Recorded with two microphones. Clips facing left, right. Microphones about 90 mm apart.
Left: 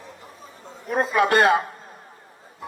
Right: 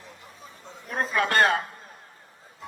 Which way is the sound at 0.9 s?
15° left (ahead or behind).